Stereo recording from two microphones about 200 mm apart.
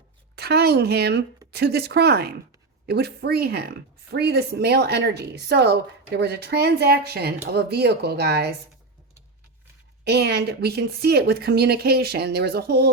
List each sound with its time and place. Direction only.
0.3 s speech: 55° right (ahead or behind)
10.0 s speech: 55° right (ahead or behind)